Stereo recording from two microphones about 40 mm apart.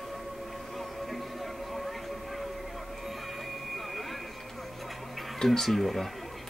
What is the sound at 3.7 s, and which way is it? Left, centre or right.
Vehicle, centre.